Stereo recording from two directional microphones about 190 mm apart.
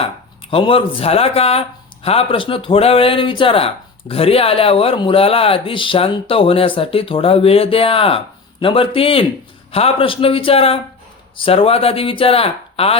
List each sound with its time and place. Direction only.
0.5 s speech: 30° left (ahead or behind)